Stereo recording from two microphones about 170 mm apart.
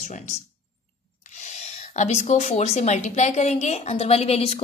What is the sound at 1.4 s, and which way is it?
A woman's voice, 40° left (ahead or behind).